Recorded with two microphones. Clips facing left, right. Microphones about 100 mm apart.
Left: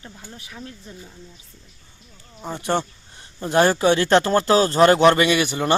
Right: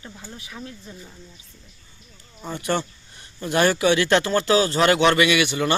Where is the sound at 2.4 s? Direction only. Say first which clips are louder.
Left 2 dB; 30° left (ahead or behind).